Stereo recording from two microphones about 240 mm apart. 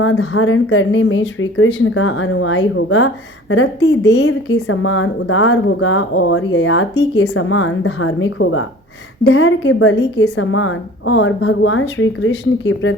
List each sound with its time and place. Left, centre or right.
0.0 s speech: left